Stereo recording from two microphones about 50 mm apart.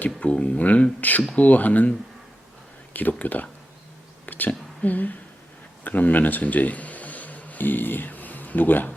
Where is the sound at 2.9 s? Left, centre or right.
Left.